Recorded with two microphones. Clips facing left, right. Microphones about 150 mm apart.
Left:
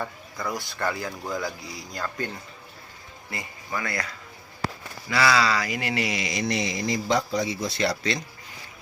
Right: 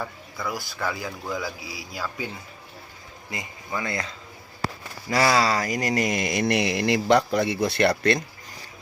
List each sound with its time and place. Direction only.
0.0 s a man's voice: 5° right (ahead or behind)
3.2 s speech: 20° right (ahead or behind)
5.0 s speech: 40° right (ahead or behind); by 8.2 s 60° right (ahead or behind)